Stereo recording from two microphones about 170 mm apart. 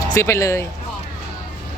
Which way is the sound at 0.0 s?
15° left (ahead or behind).